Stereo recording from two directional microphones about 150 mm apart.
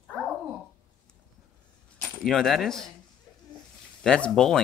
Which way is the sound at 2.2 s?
5° left (ahead or behind).